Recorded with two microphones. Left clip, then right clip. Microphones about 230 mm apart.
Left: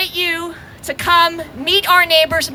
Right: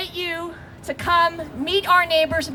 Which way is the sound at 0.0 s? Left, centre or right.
Left.